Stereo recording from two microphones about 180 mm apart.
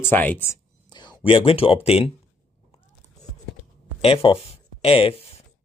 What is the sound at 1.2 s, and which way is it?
Speech, 30° left (ahead or behind).